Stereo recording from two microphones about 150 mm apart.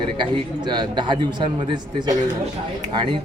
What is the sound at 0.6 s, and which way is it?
Speech, 30° right (ahead or behind).